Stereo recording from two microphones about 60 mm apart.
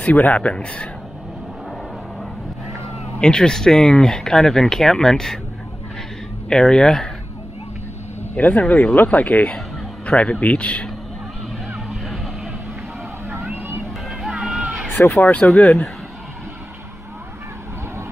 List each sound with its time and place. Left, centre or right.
0.0 s speech: left
3.2 s speech: centre
6.5 s speech: centre
8.2 s speech: left
11.7 s vehicle: centre
13.3 s vehicle: right
14.3 s a sound: right
15.1 s speech: left